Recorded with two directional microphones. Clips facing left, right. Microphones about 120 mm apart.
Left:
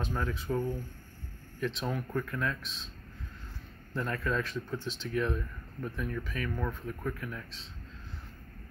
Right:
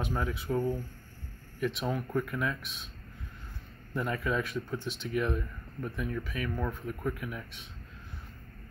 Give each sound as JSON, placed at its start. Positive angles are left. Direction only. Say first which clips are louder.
{"t": 0.0, "sound": "speech", "louder": "right 1 dB", "side_deg": -10}
{"t": 3.9, "sound": "speech", "louder": "right 1 dB", "side_deg": -10}